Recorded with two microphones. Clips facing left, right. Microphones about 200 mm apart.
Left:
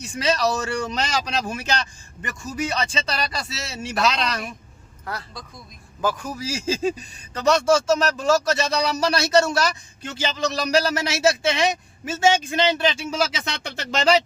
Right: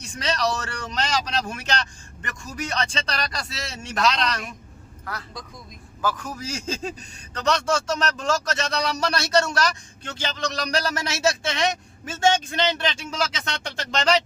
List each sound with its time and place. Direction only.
0.0 s speech: 5° left (ahead or behind)
6.0 s speech: 10° left (ahead or behind)